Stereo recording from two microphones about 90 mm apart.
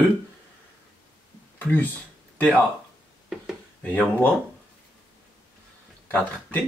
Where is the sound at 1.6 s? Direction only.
20° left (ahead or behind).